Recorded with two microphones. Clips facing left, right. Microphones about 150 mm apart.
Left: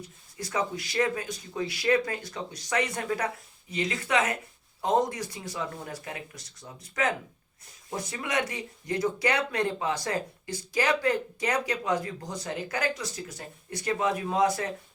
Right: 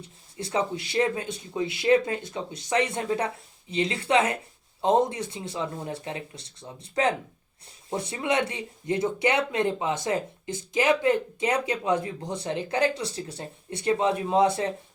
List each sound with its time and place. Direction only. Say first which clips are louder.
0.3 s speech: right 3 dB; 30° right (ahead or behind)